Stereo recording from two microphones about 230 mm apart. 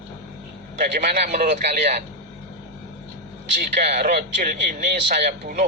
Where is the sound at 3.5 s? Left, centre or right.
Right.